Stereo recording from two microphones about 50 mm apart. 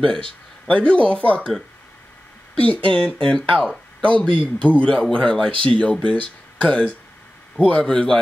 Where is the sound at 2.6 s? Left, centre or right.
Left.